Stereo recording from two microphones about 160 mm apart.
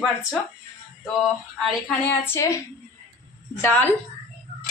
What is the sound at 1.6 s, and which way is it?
A woman's voice, 10° left (ahead or behind).